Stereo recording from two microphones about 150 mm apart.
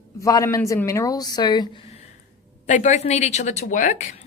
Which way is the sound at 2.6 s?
55° left (ahead or behind).